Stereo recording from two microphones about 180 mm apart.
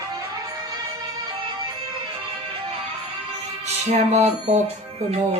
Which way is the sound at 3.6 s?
40° right (ahead or behind).